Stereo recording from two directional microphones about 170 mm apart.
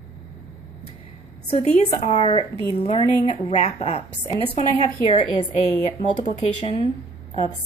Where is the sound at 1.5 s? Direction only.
45° left (ahead or behind).